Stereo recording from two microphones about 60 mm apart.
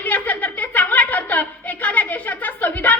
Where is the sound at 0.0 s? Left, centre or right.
Left.